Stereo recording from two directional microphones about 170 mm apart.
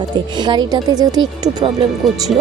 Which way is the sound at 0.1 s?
25° right (ahead or behind).